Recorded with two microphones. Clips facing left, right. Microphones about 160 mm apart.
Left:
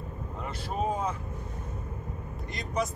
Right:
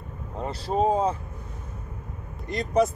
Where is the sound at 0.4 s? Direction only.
35° right (ahead or behind).